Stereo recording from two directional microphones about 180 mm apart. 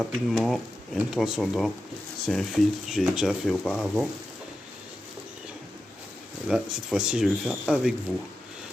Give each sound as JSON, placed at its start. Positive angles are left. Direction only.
{"t": 0.0, "sound": "speech", "side_deg": 0}
{"t": 6.5, "sound": "speech", "side_deg": -5}